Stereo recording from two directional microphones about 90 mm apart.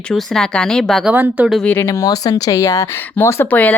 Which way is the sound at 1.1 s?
20° right (ahead or behind).